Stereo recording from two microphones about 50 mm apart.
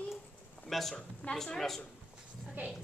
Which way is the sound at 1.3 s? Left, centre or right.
Centre.